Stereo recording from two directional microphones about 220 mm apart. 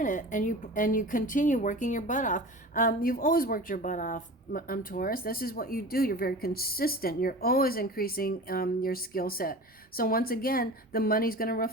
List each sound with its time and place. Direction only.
0.0 s a woman's voice: 35° left (ahead or behind)